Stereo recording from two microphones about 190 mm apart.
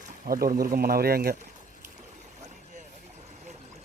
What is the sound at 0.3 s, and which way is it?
Speech, 50° right (ahead or behind).